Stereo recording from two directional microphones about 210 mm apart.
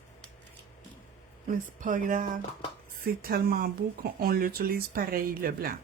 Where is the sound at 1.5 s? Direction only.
40° right (ahead or behind).